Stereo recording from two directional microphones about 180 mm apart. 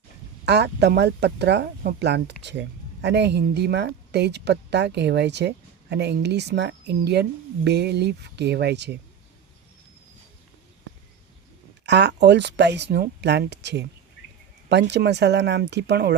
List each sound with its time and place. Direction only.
0.4 s a woman's voice: 70° right (ahead or behind)
11.9 s a woman's voice: 70° right (ahead or behind)